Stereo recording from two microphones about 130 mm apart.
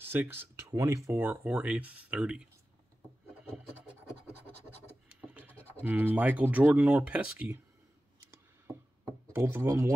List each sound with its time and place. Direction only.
0.0 s speech: 15° right (ahead or behind)
5.2 s scratch: 15° right (ahead or behind)
5.8 s speech: 15° right (ahead or behind)
9.3 s speech: 20° right (ahead or behind)